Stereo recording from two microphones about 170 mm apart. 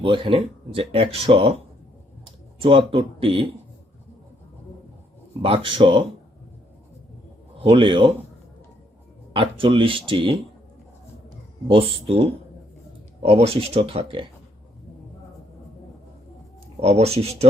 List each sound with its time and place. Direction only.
0.0 s speech: 30° right (ahead or behind)
5.4 s speech: 30° right (ahead or behind)
7.6 s speech: 30° right (ahead or behind)
9.3 s speech: 30° right (ahead or behind)
11.7 s speech: 35° right (ahead or behind)
16.8 s speech: 40° right (ahead or behind)